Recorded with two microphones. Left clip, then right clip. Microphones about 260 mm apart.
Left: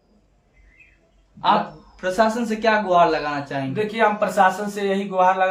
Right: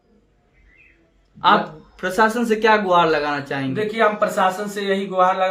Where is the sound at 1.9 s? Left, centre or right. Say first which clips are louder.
Right 2 dB; right.